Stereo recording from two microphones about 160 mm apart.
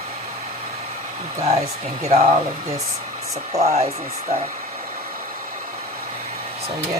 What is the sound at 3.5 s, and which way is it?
Speech, 40° right (ahead or behind).